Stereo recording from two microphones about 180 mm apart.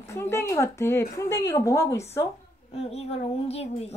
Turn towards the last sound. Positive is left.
turn(degrees=35)  # may be behind; listen again after turning